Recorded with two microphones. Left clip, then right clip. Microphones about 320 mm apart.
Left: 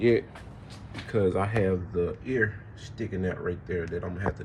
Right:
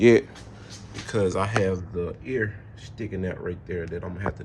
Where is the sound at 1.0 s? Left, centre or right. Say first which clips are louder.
Right 2 dB; centre.